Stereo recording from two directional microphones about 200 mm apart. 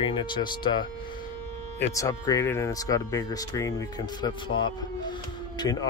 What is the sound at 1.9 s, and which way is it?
Speech, 15° left (ahead or behind).